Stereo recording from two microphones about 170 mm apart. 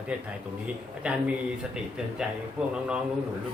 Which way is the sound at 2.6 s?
5° right (ahead or behind).